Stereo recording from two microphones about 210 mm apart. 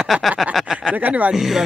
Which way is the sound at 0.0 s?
Centre (ahead or behind).